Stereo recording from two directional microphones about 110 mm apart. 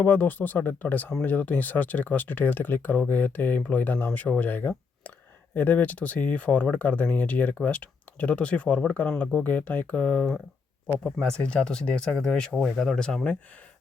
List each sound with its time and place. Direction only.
0.0 s speech: 15° left (ahead or behind)